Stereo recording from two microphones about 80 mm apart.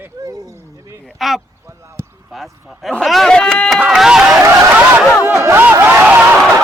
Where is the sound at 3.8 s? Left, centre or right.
Centre.